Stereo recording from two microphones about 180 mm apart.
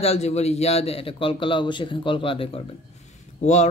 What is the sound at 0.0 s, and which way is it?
Mantra, 35° left (ahead or behind).